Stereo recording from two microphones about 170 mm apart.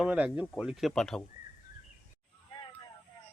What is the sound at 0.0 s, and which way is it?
Speech, 5° right (ahead or behind).